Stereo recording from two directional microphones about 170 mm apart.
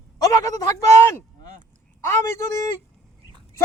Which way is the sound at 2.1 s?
15° left (ahead or behind).